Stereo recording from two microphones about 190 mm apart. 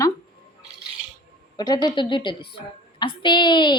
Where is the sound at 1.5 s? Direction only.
20° left (ahead or behind).